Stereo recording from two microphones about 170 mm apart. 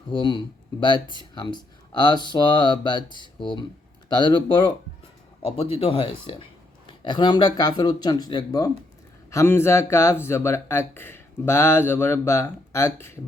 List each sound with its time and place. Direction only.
0.1 s speech: 30° left (ahead or behind)